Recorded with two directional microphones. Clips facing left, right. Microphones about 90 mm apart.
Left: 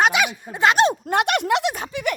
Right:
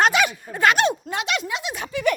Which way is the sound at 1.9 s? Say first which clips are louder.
Right 3 dB; 20° left (ahead or behind).